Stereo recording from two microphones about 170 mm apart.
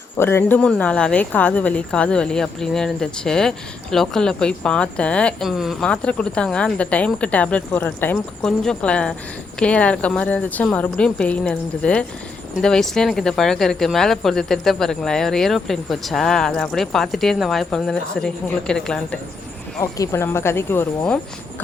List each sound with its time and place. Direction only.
0.2 s a woman's voice: 15° left (ahead or behind)
19.8 s a woman's voice: 15° left (ahead or behind)